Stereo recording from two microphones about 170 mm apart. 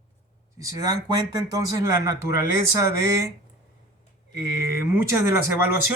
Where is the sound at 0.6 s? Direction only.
20° right (ahead or behind).